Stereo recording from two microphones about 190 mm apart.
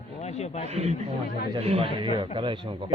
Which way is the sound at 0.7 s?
35° right (ahead or behind).